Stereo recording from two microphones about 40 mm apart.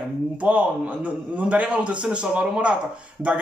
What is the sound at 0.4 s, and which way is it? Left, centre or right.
A man's voice, right.